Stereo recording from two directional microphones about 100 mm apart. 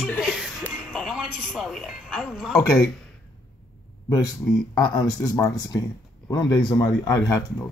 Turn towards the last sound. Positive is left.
turn(degrees=35)  # may be behind; listen again after turning